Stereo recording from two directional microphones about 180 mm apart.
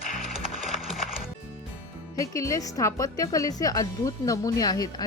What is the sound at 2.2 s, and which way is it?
A woman's voice, 20° left (ahead or behind).